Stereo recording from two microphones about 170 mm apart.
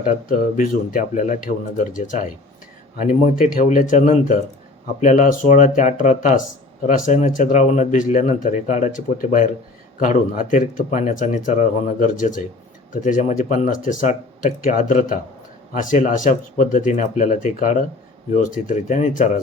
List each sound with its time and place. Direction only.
0.0 s speech: 50° left (ahead or behind)